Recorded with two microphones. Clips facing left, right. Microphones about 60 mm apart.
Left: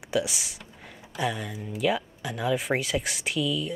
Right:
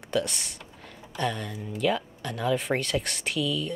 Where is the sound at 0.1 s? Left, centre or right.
Centre.